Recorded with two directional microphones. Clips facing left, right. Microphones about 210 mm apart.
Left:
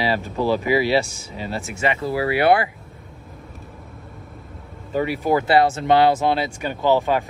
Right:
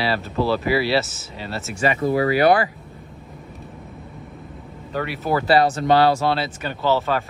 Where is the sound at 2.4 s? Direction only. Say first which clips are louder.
Left 1 dB; 25° left (ahead or behind).